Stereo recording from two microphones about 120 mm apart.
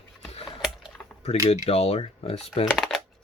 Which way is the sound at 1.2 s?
60° left (ahead or behind).